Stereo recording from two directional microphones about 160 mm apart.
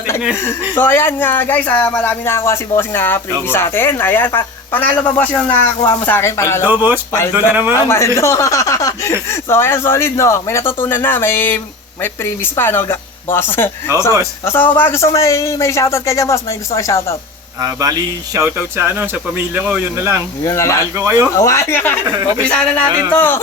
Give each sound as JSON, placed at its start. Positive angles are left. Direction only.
{"t": 0.8, "sound": "speech", "side_deg": 15}
{"t": 6.6, "sound": "speech", "side_deg": -10}
{"t": 7.9, "sound": "a man's voice", "side_deg": 15}
{"t": 13.9, "sound": "a man's voice", "side_deg": -20}
{"t": 14.4, "sound": "a man's voice", "side_deg": 15}
{"t": 17.6, "sound": "a man's voice", "side_deg": -20}
{"t": 20.4, "sound": "speech", "side_deg": 20}
{"t": 20.9, "sound": "a man's voice", "side_deg": -20}
{"t": 21.3, "sound": "speech", "side_deg": 20}